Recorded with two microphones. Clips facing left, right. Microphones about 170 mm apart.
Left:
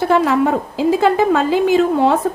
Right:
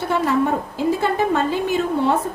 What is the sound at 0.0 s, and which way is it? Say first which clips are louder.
A woman's voice: left 5 dB; 90° left.